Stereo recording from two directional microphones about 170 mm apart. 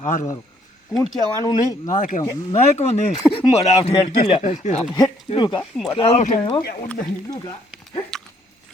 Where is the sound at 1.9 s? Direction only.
50° left (ahead or behind).